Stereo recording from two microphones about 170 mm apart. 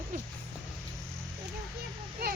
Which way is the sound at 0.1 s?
55° right (ahead or behind).